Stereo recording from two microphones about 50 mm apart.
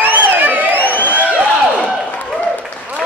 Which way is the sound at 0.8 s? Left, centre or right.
Left.